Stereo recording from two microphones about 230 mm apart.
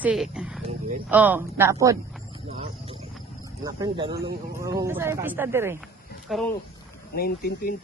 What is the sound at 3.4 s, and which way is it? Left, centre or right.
Speech, centre.